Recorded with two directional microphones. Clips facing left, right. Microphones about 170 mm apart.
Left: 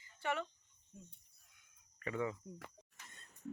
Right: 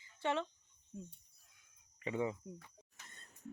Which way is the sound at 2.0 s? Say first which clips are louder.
Right 2 dB; 20° right (ahead or behind).